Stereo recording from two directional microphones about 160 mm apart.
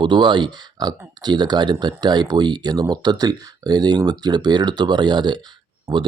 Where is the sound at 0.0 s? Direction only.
30° right (ahead or behind).